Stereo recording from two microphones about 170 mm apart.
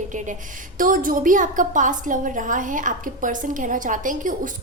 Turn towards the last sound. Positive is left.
turn(degrees=-50)  # may be behind; listen again after turning